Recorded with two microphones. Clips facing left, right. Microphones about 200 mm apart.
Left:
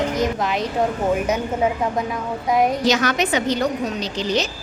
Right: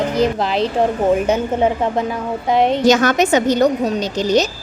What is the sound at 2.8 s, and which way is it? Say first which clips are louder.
A woman's voice: right 6 dB; 45° right (ahead or behind).